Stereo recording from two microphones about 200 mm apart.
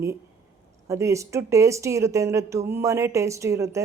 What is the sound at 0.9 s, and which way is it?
Speech, 15° right (ahead or behind).